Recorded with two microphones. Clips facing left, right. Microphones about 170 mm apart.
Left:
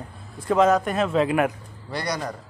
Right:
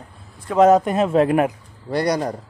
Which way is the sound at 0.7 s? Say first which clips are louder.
Right 5 dB; 20° right (ahead or behind).